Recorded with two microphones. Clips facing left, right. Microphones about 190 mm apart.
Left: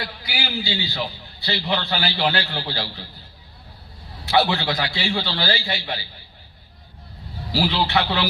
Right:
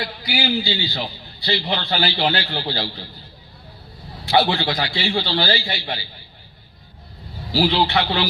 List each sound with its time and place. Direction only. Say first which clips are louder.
0.2 s a man's voice: right 10 dB; 40° right (ahead or behind)
4.3 s a man's voice: right 1 dB; 35° right (ahead or behind)
7.6 s a man's voice: right 3 dB; 35° right (ahead or behind)